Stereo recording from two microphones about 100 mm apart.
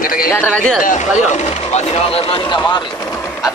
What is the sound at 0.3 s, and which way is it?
Speech, 15° left (ahead or behind).